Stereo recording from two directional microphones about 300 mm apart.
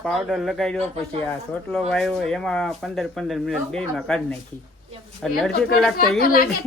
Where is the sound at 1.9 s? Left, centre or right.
Centre.